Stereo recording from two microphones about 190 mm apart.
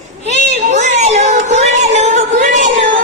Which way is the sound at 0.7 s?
35° right (ahead or behind).